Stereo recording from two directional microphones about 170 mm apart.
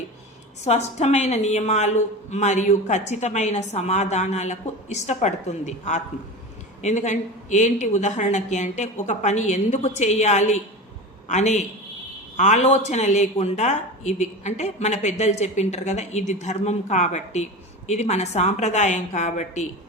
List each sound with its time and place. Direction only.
0.6 s a woman's voice: 40° left (ahead or behind)